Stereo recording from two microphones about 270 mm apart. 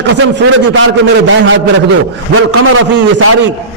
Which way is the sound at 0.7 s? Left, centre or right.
Right.